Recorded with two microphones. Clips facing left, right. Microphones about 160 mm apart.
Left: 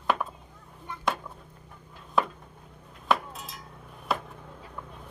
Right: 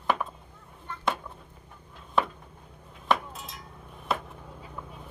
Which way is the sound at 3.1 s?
Centre (ahead or behind).